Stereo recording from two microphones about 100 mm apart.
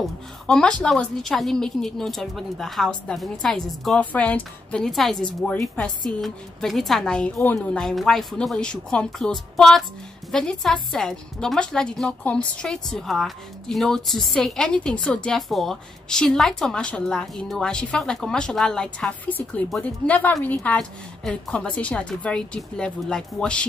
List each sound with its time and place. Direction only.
0.5 s a woman's voice: 10° left (ahead or behind)